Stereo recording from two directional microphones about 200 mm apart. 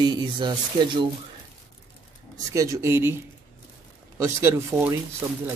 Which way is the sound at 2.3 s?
15° right (ahead or behind).